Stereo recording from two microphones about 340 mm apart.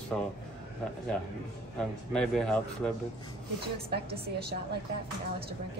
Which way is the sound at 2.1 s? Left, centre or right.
Centre.